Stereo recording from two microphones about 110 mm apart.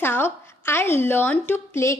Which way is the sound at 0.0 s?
20° left (ahead or behind).